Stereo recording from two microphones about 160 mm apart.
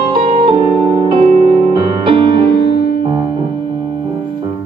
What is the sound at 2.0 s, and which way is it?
Music, 30° right (ahead or behind).